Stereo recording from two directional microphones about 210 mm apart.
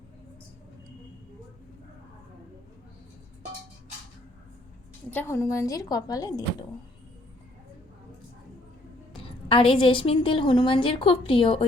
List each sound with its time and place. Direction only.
5.1 s a woman's voice: 15° left (ahead or behind)
9.5 s a woman's voice: 25° left (ahead or behind)